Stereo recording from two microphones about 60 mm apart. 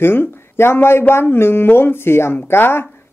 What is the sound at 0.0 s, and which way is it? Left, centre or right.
Speech, left.